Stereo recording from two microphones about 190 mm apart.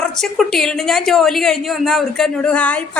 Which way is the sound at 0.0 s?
Centre (ahead or behind).